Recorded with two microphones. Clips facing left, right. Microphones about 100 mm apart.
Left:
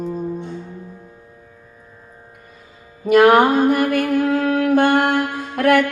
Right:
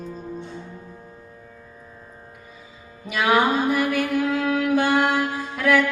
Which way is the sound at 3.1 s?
50° left (ahead or behind).